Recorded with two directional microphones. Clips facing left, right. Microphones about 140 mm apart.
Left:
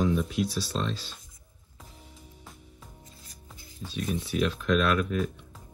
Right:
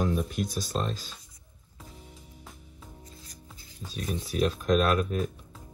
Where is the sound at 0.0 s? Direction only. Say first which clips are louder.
Left 2 dB; 45° right (ahead or behind).